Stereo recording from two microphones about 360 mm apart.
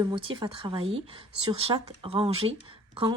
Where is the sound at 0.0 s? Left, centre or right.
Centre.